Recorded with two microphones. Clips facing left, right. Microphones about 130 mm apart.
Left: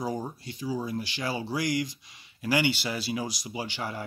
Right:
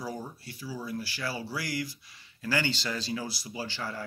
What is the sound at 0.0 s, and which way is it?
Speech, 20° left (ahead or behind).